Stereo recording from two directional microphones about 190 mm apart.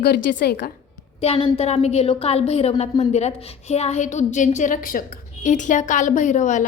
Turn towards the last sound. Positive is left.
turn(degrees=40)  # may be behind; listen again after turning